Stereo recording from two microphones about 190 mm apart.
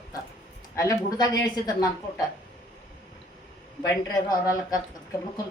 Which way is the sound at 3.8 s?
20° left (ahead or behind).